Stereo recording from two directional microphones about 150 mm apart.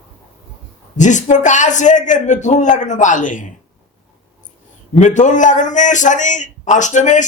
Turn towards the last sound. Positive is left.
turn(degrees=55)  # may be behind; listen again after turning